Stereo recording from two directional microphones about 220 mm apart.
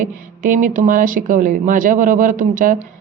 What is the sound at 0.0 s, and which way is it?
A woman's voice, 40° right (ahead or behind).